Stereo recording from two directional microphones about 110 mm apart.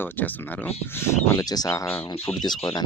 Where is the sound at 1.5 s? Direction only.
35° left (ahead or behind).